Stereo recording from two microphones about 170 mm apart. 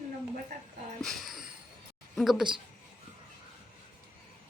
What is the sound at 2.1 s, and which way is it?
Speech, centre (ahead or behind).